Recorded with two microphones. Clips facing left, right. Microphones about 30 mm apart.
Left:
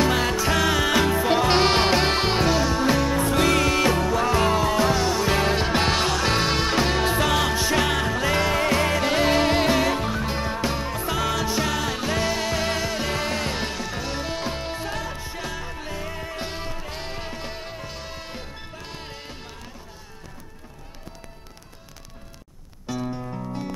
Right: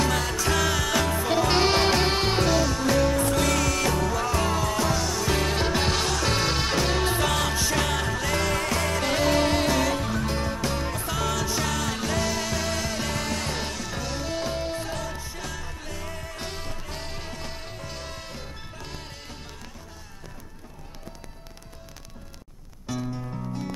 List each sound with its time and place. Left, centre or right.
0.0 s music: left
23.1 s music: centre